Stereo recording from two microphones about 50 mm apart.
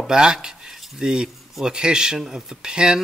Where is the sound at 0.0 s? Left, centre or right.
Centre.